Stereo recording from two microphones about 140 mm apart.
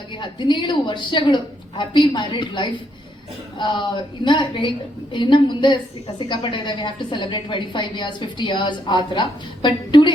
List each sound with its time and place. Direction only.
0.2 s a woman's voice: 35° left (ahead or behind)